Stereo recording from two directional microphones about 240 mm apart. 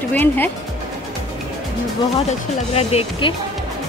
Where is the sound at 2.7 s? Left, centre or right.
Left.